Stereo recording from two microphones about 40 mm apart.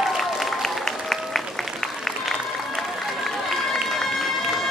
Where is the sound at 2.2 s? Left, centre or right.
Centre.